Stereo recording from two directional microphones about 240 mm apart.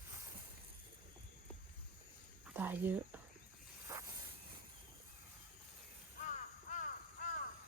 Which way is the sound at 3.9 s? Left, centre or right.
Centre.